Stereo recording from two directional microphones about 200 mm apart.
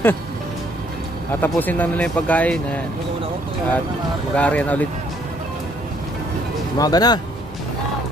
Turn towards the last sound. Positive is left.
turn(degrees=20)  # may be behind; listen again after turning